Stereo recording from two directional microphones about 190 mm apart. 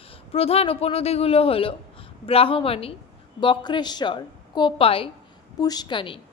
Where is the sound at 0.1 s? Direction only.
30° left (ahead or behind).